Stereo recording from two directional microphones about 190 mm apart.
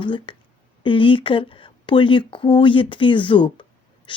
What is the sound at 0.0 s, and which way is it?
A woman's voice, 25° left (ahead or behind).